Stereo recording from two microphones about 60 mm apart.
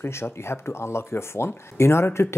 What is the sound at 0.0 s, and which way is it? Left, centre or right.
Speech, left.